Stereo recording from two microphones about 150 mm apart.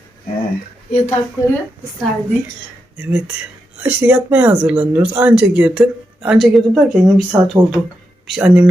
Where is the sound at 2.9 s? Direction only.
10° right (ahead or behind).